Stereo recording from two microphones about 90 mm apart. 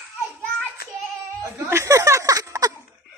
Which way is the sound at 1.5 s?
30° right (ahead or behind).